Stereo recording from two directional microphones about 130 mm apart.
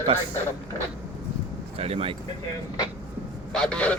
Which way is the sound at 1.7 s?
50° right (ahead or behind).